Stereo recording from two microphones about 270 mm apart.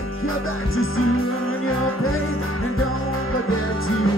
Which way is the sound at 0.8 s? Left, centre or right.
Left.